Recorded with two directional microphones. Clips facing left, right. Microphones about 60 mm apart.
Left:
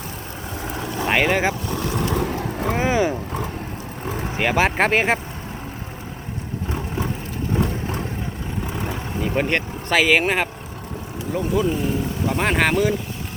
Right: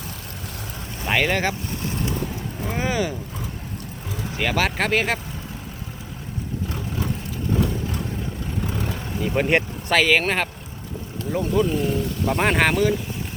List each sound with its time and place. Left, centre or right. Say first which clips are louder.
0.7 s vehicle: left 8 dB; left
1.0 s speech: left 2 dB; centre
2.1 s vehicle: left 6 dB; left
2.7 s roaring cats: left 4 dB; left
4.0 s vehicle: left 6 dB; left
4.3 s speech: left 3 dB; left
6.7 s a sound: left 5 dB; left
7.6 s vehicle: left 1 dB; left
8.6 s vehicle: left 2 dB; centre
9.9 s speech: left 1 dB; centre